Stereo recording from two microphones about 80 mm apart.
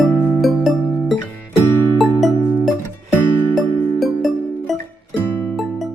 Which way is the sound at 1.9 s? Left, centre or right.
Centre.